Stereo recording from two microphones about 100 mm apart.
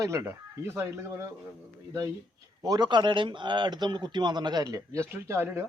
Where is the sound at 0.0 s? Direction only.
30° right (ahead or behind).